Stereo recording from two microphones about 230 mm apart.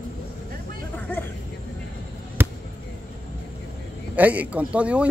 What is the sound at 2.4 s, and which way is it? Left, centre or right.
Basketball bounce, centre.